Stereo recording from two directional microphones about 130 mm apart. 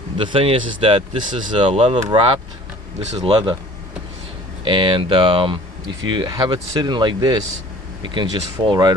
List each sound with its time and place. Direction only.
0.2 s speech: 40° right (ahead or behind)
3.0 s speech: 60° right (ahead or behind)
4.6 s speech: 40° right (ahead or behind)